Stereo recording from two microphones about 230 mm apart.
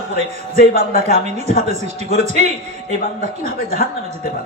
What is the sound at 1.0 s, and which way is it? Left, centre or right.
A man's voice, right.